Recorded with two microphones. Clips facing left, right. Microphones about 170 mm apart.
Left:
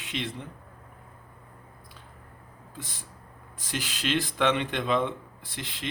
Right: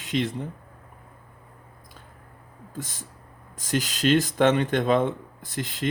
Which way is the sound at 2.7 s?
45° right (ahead or behind).